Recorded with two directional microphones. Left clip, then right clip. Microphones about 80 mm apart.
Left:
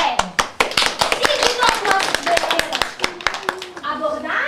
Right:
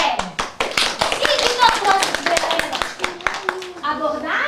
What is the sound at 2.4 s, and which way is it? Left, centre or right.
Clapping, left.